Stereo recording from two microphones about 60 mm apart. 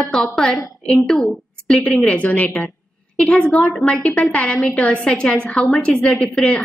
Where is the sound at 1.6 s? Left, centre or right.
Centre.